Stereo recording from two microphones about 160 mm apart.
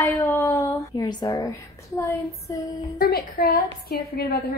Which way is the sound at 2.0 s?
20° left (ahead or behind).